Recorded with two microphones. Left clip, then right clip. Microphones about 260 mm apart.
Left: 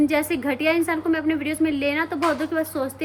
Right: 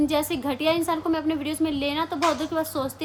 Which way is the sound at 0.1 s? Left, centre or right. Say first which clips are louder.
Left 3 dB; centre.